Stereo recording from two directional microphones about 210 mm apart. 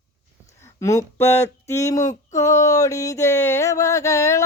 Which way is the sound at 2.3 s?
15° left (ahead or behind).